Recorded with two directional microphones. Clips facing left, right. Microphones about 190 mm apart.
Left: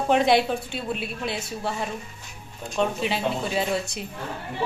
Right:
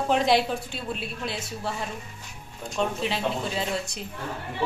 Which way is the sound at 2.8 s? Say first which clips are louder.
Left 2 dB; 5° left (ahead or behind).